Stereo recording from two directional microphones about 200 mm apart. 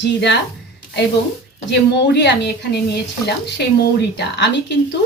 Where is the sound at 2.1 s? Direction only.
60° left (ahead or behind).